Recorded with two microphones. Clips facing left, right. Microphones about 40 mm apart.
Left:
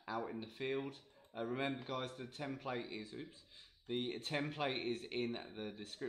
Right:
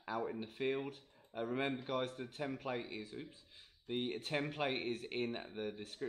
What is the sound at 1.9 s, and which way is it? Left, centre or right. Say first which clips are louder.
Speech: right 4 dB; right.